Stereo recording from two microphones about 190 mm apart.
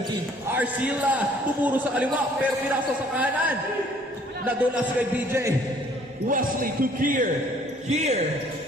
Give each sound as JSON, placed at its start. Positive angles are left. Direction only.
{"t": 0.5, "sound": "a man's voice", "side_deg": -10}
{"t": 6.2, "sound": "a man's voice", "side_deg": -45}
{"t": 7.9, "sound": "a man's voice", "side_deg": -35}